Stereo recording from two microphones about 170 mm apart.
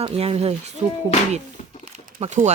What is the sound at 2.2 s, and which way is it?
Speech, 45° right (ahead or behind).